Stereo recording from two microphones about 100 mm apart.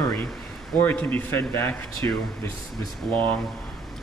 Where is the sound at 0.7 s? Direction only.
20° left (ahead or behind).